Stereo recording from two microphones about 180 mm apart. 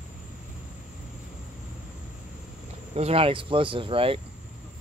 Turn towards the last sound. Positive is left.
turn(degrees=-30)  # may be behind; listen again after turning